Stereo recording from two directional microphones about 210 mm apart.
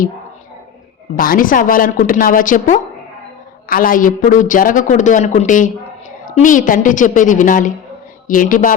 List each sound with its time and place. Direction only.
1.1 s a man's voice: 40° left (ahead or behind)